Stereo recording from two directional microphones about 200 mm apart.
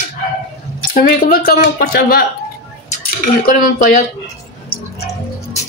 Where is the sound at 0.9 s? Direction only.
45° left (ahead or behind).